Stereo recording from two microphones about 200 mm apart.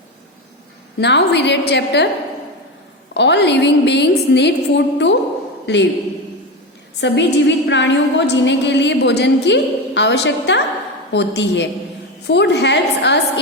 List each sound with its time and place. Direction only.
0.9 s a woman's voice: 60° left (ahead or behind)
3.2 s a woman's voice: 60° left (ahead or behind)
7.0 s a woman's voice: 60° left (ahead or behind)